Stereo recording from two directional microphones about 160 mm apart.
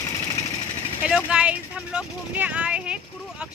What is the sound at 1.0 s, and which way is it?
Speech, 5° right (ahead or behind).